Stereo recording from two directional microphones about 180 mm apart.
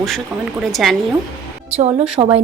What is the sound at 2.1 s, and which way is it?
Speech, 30° right (ahead or behind).